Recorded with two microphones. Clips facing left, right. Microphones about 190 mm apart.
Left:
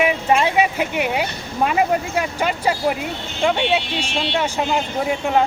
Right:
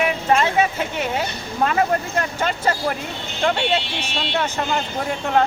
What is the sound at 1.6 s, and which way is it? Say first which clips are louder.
Speech: left 1 dB; 10° left (ahead or behind).